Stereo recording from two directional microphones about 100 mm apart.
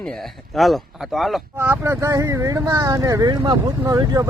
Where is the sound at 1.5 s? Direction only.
25° right (ahead or behind).